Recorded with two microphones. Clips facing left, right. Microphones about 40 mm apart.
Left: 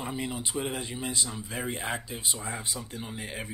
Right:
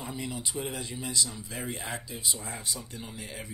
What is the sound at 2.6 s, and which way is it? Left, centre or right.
Speech, left.